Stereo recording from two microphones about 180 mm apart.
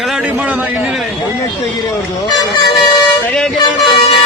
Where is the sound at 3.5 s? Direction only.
25° left (ahead or behind).